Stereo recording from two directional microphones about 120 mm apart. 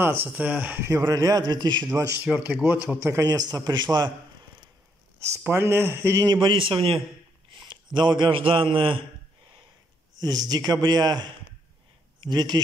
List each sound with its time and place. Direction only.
0.0 s speech: 15° right (ahead or behind)
1.0 s a man's voice: 30° right (ahead or behind)
2.3 s speech: 15° right (ahead or behind)
3.3 s a man's voice: 30° right (ahead or behind)
5.2 s speech: 20° right (ahead or behind)
6.4 s a man's voice: 45° right (ahead or behind)
10.2 s a man's voice: 35° right (ahead or behind)